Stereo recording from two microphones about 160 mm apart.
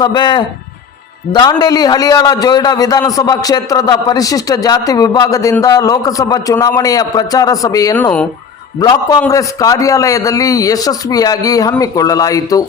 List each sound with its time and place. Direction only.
0.0 s a man's voice: 25° left (ahead or behind)